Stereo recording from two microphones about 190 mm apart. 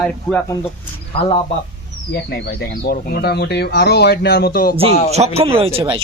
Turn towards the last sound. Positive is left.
turn(degrees=-30)  # may be behind; listen again after turning